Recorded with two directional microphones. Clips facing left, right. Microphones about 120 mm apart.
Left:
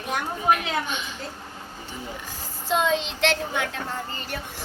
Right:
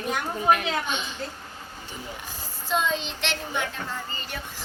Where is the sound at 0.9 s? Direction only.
25° right (ahead or behind).